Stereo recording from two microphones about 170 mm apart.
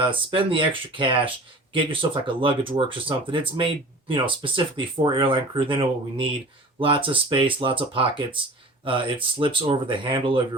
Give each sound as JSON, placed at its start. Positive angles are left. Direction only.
{"t": 0.0, "sound": "speech", "side_deg": -30}